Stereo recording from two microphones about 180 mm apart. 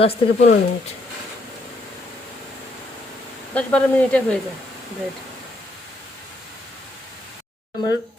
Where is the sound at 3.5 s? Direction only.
10° left (ahead or behind).